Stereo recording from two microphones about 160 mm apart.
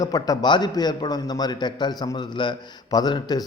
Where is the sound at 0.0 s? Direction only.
25° left (ahead or behind).